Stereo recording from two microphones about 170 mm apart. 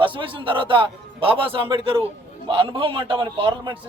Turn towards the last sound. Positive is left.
turn(degrees=-30)  # may be behind; listen again after turning